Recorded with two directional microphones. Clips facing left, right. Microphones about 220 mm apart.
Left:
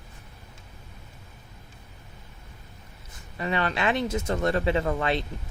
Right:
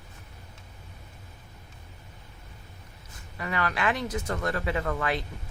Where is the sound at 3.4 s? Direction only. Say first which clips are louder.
Left 3 dB; 25° left (ahead or behind).